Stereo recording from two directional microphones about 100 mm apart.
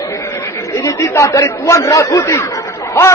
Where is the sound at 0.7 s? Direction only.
30° left (ahead or behind).